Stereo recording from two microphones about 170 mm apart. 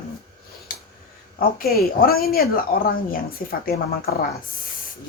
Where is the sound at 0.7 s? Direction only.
60° left (ahead or behind).